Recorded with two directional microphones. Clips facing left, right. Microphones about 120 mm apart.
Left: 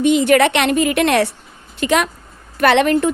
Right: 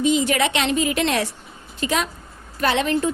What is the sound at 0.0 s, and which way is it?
A woman's voice, 65° left (ahead or behind).